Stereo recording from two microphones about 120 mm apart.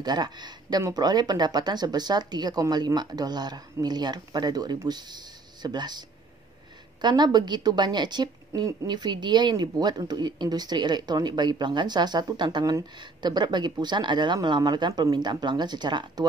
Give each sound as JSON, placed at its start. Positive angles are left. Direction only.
{"t": 0.0, "sound": "a woman's voice", "side_deg": -35}